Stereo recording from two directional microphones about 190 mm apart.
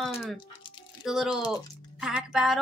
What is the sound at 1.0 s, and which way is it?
Speech, centre (ahead or behind).